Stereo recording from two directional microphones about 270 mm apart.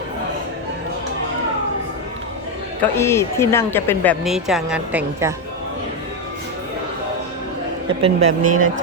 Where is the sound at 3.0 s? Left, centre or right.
Centre.